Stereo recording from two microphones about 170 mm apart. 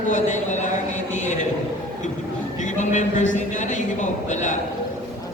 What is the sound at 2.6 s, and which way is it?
A woman's voice, 45° left (ahead or behind).